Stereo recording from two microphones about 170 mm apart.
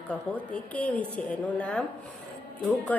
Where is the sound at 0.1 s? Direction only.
10° left (ahead or behind).